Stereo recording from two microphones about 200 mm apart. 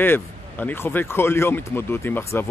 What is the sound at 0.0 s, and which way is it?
Speech, 10° left (ahead or behind).